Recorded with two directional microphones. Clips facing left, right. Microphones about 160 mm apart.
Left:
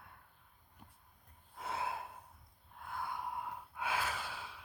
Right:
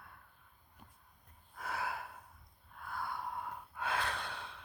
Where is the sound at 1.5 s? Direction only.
25° left (ahead or behind).